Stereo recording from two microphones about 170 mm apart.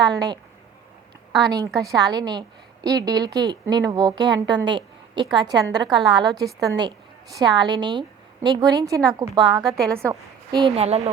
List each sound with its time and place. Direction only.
0.0 s a woman's voice: 25° right (ahead or behind)
1.5 s a woman's voice: 20° right (ahead or behind)
9.6 s a woman's voice: 5° left (ahead or behind)
10.0 s a woman's voice: 20° right (ahead or behind)
10.8 s speech: 40° right (ahead or behind)